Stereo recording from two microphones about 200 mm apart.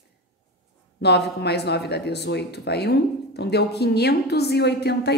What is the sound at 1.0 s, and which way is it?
Speech, 55° left (ahead or behind).